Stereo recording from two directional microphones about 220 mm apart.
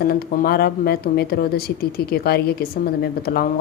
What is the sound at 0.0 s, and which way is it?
Speech, 45° left (ahead or behind).